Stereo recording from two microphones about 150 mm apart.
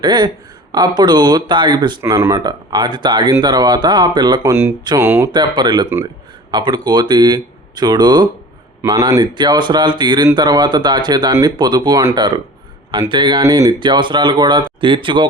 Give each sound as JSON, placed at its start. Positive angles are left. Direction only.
{"t": 0.0, "sound": "speech", "side_deg": -30}
{"t": 2.0, "sound": "speech", "side_deg": -20}
{"t": 4.9, "sound": "speech", "side_deg": -15}
{"t": 5.3, "sound": "speech", "side_deg": -30}